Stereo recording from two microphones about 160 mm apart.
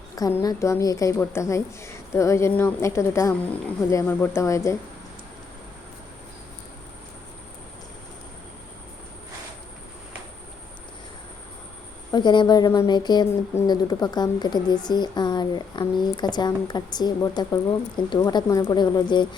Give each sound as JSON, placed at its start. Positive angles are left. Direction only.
{"t": 0.2, "sound": "speech", "side_deg": 20}
{"t": 12.1, "sound": "speech", "side_deg": 30}